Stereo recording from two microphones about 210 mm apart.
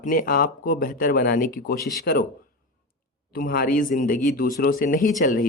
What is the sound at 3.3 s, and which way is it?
Speech, 45° left (ahead or behind).